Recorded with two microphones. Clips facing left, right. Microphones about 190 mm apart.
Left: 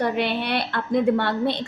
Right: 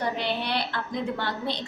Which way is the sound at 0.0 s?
60° left (ahead or behind).